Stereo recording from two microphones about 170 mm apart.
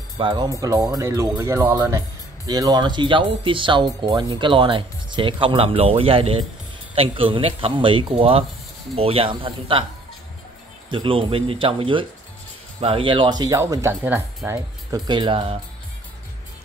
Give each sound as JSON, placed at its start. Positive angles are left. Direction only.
{"t": 0.2, "sound": "speech", "side_deg": -25}
{"t": 10.9, "sound": "speech", "side_deg": -30}
{"t": 15.0, "sound": "speech", "side_deg": -30}